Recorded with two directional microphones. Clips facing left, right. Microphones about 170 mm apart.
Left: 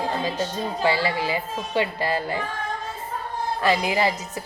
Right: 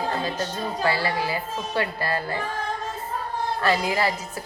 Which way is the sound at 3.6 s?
15° left (ahead or behind).